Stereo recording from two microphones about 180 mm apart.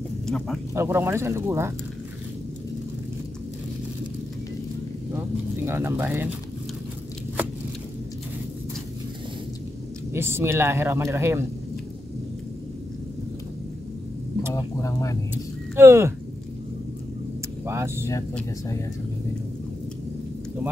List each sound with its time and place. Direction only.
0.7 s speech: 15° right (ahead or behind)
5.7 s speech: 15° right (ahead or behind)
10.1 s speech: 15° right (ahead or behind)
14.5 s speech: 15° left (ahead or behind)
15.7 s speech: 15° right (ahead or behind)
17.6 s speech: 15° right (ahead or behind)